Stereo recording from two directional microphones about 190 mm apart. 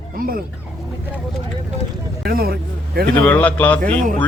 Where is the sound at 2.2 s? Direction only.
55° right (ahead or behind).